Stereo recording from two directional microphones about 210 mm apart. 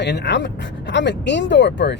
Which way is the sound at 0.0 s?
55° left (ahead or behind).